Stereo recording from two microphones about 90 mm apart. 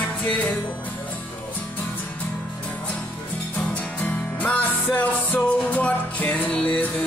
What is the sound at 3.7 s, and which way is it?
Music, 15° left (ahead or behind).